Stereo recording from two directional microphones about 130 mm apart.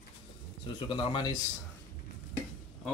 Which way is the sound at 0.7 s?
40° left (ahead or behind).